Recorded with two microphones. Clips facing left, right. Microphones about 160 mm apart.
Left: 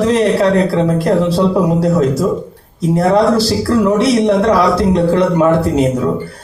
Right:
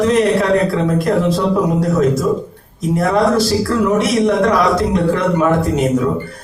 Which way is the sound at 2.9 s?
30° left (ahead or behind).